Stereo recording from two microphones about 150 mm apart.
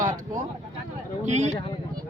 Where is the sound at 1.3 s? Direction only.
50° right (ahead or behind).